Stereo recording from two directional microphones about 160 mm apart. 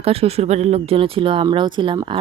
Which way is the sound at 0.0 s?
40° right (ahead or behind).